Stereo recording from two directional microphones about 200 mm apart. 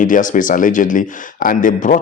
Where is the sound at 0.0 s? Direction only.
40° left (ahead or behind).